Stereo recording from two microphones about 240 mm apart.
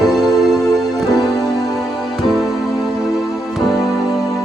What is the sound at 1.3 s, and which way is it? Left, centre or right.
Music, centre.